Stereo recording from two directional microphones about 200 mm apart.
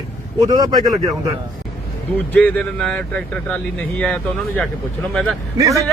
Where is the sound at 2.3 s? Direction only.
5° left (ahead or behind).